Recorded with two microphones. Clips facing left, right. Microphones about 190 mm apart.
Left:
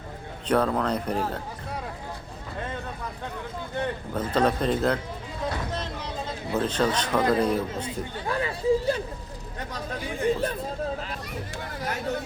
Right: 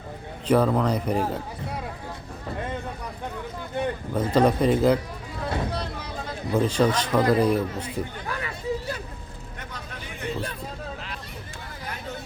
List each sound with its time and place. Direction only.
0.4 s speech: 5° right (ahead or behind)
3.8 s speech: 10° right (ahead or behind)
6.5 s speech: 10° right (ahead or behind)
7.8 s chatter: 30° left (ahead or behind)